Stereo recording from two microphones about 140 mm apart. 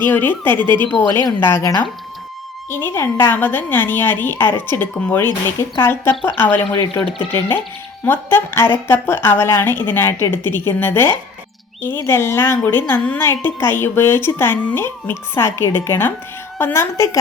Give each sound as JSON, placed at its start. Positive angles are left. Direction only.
{"t": 0.0, "sound": "a woman's voice", "side_deg": 15}
{"t": 6.7, "sound": "speech", "side_deg": 30}
{"t": 8.0, "sound": "a woman's voice", "side_deg": 15}